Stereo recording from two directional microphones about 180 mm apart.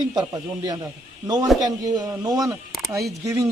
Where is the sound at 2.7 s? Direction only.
Centre (ahead or behind).